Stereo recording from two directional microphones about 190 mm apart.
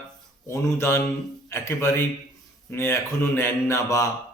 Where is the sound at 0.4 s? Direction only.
15° left (ahead or behind).